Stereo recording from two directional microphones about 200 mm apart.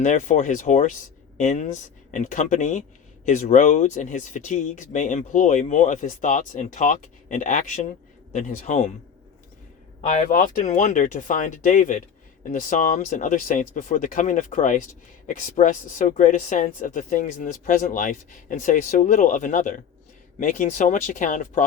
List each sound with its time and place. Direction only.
0.0 s speech: 40° left (ahead or behind)
10.1 s speech: 40° left (ahead or behind)